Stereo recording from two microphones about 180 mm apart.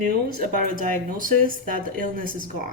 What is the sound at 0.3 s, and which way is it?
Speech, 45° right (ahead or behind).